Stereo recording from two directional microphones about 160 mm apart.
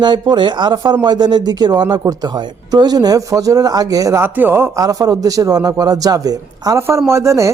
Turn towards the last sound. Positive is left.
turn(degrees=-20)  # may be behind; listen again after turning